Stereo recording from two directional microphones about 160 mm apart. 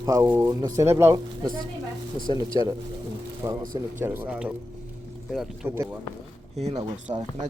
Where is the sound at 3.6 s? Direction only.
60° right (ahead or behind).